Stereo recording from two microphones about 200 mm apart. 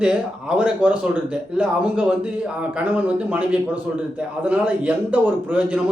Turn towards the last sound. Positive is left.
turn(degrees=-5)  # may be behind; listen again after turning